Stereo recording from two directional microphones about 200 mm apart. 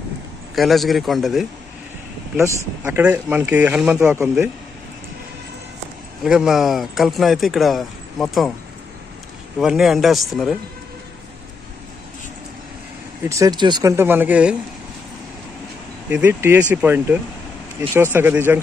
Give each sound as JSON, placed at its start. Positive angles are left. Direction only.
{"t": 0.6, "sound": "speech", "side_deg": 0}
{"t": 2.4, "sound": "speech", "side_deg": -10}
{"t": 6.2, "sound": "speech", "side_deg": 0}
{"t": 9.6, "sound": "speech", "side_deg": 0}
{"t": 13.3, "sound": "speech", "side_deg": -20}
{"t": 16.1, "sound": "speech", "side_deg": -10}